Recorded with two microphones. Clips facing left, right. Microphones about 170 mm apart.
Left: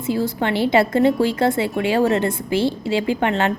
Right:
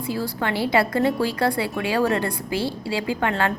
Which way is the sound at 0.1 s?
25° left (ahead or behind).